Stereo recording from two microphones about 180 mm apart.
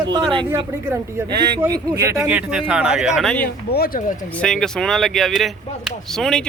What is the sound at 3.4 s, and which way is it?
Speech, 60° left (ahead or behind).